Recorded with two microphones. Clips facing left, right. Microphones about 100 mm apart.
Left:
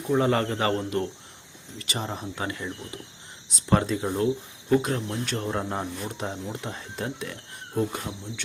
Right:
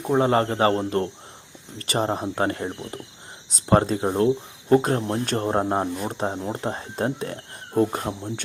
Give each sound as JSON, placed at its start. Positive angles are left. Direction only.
{"t": 0.1, "sound": "speech", "side_deg": -35}